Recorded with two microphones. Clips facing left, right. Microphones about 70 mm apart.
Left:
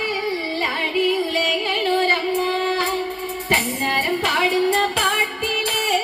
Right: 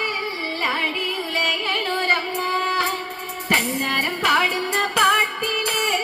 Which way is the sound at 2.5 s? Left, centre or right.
Centre.